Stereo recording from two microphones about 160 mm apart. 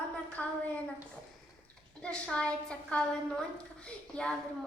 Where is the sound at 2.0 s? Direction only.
5° left (ahead or behind).